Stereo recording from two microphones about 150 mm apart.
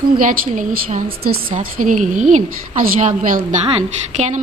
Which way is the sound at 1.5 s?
60° right (ahead or behind).